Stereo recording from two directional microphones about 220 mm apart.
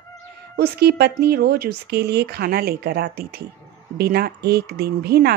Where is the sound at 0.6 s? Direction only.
45° right (ahead or behind).